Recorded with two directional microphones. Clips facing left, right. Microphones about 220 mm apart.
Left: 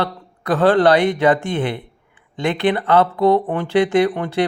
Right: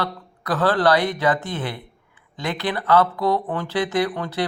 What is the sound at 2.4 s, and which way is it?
Speech, 25° left (ahead or behind).